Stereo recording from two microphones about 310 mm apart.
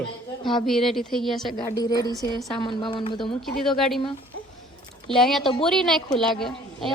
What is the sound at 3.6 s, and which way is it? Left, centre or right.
Speech, centre.